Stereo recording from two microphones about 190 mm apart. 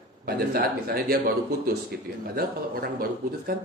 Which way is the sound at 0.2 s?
55° right (ahead or behind).